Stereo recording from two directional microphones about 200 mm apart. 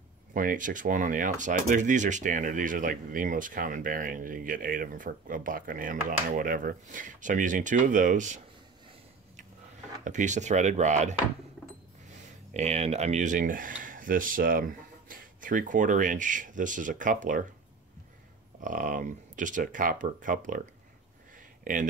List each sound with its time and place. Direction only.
0.3 s speech: 40° right (ahead or behind)
10.0 s speech: 40° right (ahead or behind)
18.6 s speech: 40° right (ahead or behind)
21.7 s speech: 40° right (ahead or behind)